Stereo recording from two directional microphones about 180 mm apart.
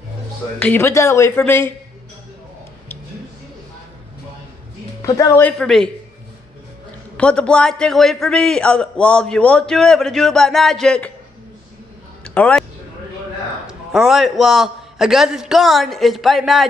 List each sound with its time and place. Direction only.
0.6 s speech: 10° left (ahead or behind)
5.0 s speech: 15° left (ahead or behind)
5.6 s a man's voice: 5° left (ahead or behind)
7.2 s a man's voice: 5° left (ahead or behind)
12.4 s a man's voice: 5° left (ahead or behind)
13.7 s a man's voice: centre (ahead or behind)